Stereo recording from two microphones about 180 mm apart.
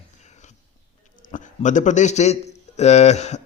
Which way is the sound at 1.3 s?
45° left (ahead or behind).